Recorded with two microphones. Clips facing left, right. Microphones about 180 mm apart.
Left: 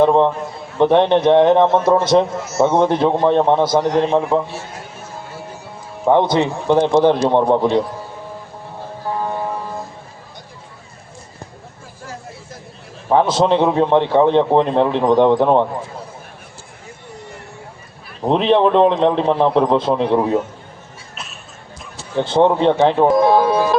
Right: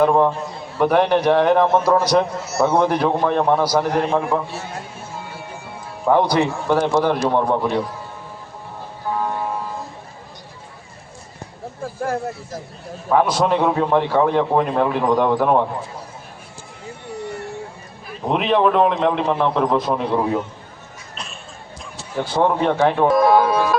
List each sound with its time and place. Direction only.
0.0 s a man's voice: 25° left (ahead or behind)
6.1 s a man's voice: 20° left (ahead or behind)
13.1 s a man's voice: 25° left (ahead or behind)
18.3 s a man's voice: 30° left (ahead or behind)
22.1 s a man's voice: 25° left (ahead or behind)